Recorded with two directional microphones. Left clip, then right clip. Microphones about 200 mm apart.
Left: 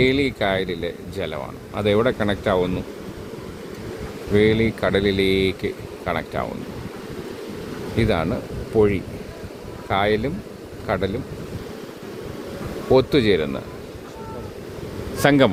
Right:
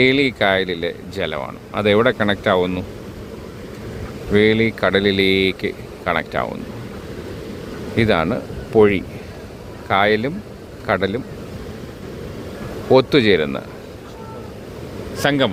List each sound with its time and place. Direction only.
0.0 s speech: centre (ahead or behind)
4.3 s speech: 5° left (ahead or behind)
7.9 s speech: centre (ahead or behind)
8.7 s speech: 10° right (ahead or behind)
9.9 s speech: 5° left (ahead or behind)
12.9 s speech: 5° left (ahead or behind)
15.2 s speech: 25° left (ahead or behind)